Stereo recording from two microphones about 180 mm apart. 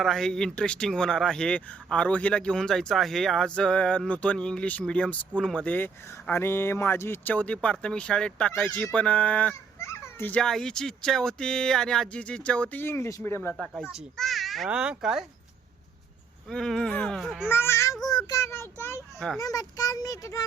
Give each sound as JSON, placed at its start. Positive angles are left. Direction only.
{"t": 0.0, "sound": "speech", "side_deg": 0}
{"t": 13.6, "sound": "speech", "side_deg": -5}
{"t": 16.5, "sound": "speech", "side_deg": 0}
{"t": 17.5, "sound": "a child's voice", "side_deg": 15}